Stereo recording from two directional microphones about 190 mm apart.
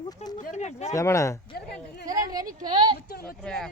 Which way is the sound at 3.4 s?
5° left (ahead or behind).